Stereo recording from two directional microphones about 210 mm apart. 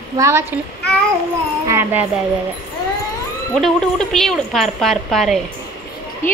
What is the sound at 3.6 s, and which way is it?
A woman's voice, centre (ahead or behind).